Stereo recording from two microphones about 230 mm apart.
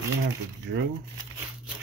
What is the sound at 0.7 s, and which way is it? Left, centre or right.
Speech, right.